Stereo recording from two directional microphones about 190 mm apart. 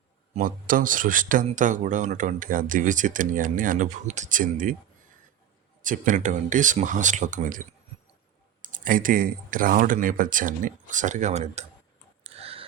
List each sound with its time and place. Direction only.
0.3 s speech: 45° right (ahead or behind)
5.8 s speech: 45° right (ahead or behind)
8.6 s speech: 45° right (ahead or behind)
12.2 s tick: 30° right (ahead or behind)